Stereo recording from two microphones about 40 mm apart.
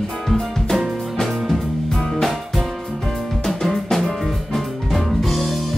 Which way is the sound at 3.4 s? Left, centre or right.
Centre.